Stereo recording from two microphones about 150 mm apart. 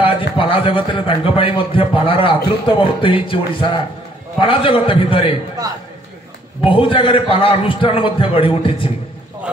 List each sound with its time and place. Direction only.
0.0 s a man's voice: 35° left (ahead or behind)
6.6 s a man's voice: 35° left (ahead or behind)